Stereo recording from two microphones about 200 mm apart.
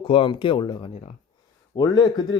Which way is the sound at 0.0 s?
25° left (ahead or behind).